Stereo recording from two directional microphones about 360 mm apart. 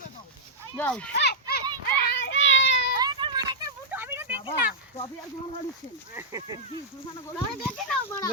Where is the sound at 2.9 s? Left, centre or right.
Centre.